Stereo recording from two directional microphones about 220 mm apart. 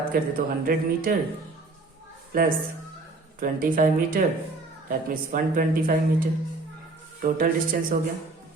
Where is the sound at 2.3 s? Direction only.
40° right (ahead or behind).